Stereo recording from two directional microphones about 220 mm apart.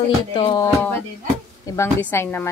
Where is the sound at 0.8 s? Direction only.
10° left (ahead or behind).